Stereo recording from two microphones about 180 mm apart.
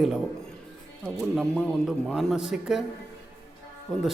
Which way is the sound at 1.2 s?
Centre (ahead or behind).